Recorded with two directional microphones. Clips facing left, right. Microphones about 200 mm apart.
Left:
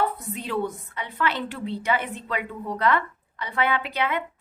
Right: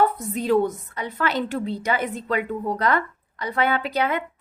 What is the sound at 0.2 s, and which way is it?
A woman's voice, 40° right (ahead or behind).